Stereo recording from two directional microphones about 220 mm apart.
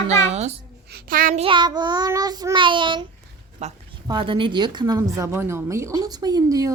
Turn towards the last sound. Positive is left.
turn(degrees=-15)  # may be behind; listen again after turning